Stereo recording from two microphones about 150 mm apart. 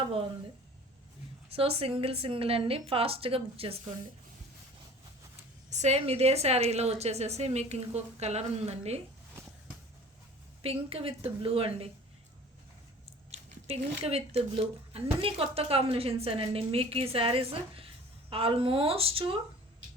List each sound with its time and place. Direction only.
1.5 s speech: 40° right (ahead or behind)
5.7 s a woman's voice: 45° right (ahead or behind)
10.6 s speech: 40° right (ahead or behind)
13.3 s speech: 40° right (ahead or behind)